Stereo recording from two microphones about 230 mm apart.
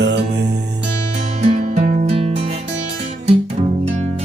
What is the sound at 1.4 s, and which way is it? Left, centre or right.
Music, right.